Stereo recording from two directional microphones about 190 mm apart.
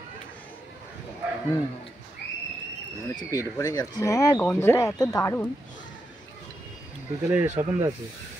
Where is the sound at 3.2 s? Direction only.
15° left (ahead or behind).